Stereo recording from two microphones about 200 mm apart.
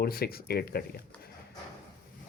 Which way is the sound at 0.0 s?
50° left (ahead or behind).